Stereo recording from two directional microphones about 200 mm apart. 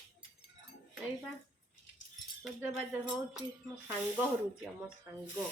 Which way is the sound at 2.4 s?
10° right (ahead or behind).